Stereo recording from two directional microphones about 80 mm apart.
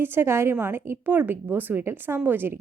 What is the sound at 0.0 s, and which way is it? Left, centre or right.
A woman's voice, right.